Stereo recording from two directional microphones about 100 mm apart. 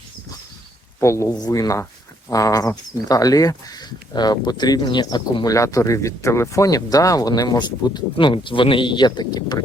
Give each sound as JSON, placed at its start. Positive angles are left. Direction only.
{"t": 1.0, "sound": "speech", "side_deg": 30}
{"t": 5.5, "sound": "speech", "side_deg": 30}
{"t": 8.1, "sound": "speech", "side_deg": 55}